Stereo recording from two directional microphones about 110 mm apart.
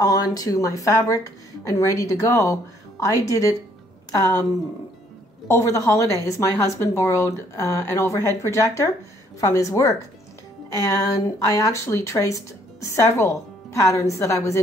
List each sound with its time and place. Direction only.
0.0 s speech: 35° left (ahead or behind)
5.5 s speech: 30° left (ahead or behind)